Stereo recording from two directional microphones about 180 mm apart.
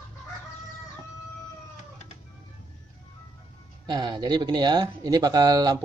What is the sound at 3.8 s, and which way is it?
Speech, 25° right (ahead or behind).